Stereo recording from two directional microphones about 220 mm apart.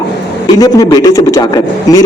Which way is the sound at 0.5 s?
15° left (ahead or behind).